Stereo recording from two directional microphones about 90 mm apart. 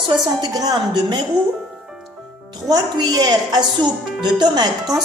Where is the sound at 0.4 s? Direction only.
45° right (ahead or behind).